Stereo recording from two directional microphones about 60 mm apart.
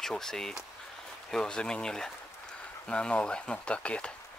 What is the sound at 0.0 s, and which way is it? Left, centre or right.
Speech, centre.